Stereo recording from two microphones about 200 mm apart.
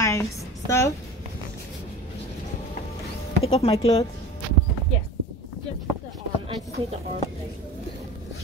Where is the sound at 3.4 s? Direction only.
30° left (ahead or behind).